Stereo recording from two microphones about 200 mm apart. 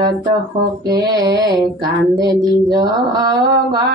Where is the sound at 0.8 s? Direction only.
20° right (ahead or behind).